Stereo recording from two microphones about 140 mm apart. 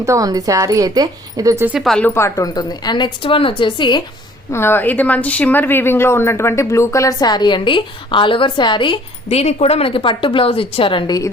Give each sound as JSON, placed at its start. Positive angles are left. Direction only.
{"t": 0.0, "sound": "speech", "side_deg": -25}
{"t": 1.8, "sound": "speech", "side_deg": 5}
{"t": 2.0, "sound": "a woman's voice", "side_deg": 20}
{"t": 4.5, "sound": "a woman's voice", "side_deg": 15}
{"t": 9.3, "sound": "a woman's voice", "side_deg": 50}